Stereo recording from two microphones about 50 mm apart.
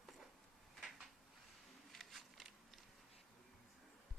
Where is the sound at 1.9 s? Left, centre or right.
Centre.